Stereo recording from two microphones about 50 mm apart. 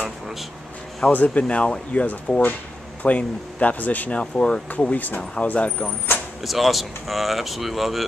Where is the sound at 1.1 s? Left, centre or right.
Left.